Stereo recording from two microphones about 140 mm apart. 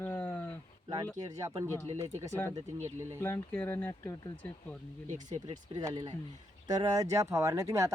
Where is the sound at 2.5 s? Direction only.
55° right (ahead or behind).